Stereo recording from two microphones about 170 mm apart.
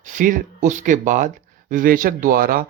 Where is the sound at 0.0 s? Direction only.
50° right (ahead or behind).